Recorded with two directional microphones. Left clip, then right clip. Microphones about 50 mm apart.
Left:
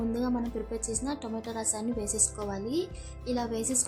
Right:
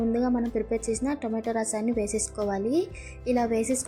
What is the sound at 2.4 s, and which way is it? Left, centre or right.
Speech, centre.